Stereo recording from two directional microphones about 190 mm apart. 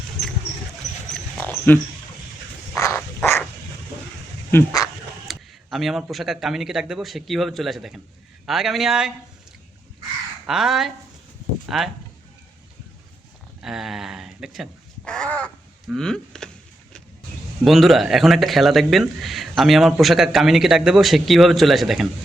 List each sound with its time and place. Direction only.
1.1 s a sound: 5° left (ahead or behind)
4.5 s speech: 20° left (ahead or behind)
5.3 s speech: centre (ahead or behind)
10.4 s speech: centre (ahead or behind)
13.6 s speech: centre (ahead or behind)
17.7 s speech: centre (ahead or behind)